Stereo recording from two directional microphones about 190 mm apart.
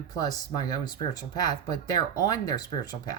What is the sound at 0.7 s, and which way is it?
Speech, 20° left (ahead or behind).